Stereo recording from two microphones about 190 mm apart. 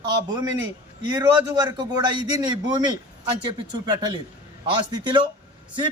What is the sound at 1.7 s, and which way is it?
A man's voice, 20° right (ahead or behind).